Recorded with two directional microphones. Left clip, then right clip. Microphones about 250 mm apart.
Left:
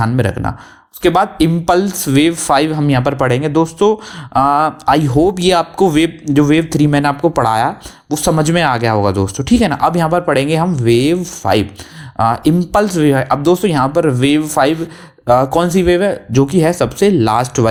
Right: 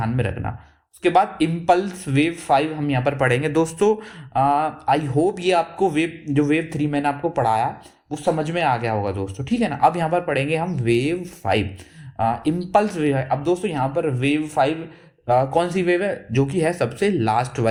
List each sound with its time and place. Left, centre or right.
0.0 s speech: left
4.4 s speech: left